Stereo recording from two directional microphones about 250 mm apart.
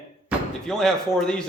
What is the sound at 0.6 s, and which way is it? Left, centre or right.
Speech, centre.